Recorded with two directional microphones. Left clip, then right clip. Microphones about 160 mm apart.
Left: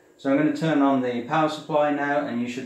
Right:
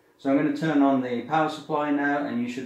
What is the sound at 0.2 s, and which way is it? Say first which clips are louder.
Speech: left 2 dB; 30° left (ahead or behind).